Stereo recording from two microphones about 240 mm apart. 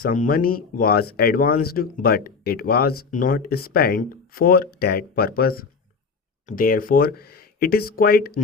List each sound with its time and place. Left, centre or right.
0.0 s speech: left